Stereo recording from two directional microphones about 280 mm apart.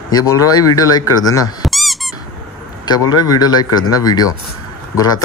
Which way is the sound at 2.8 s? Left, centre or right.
Centre.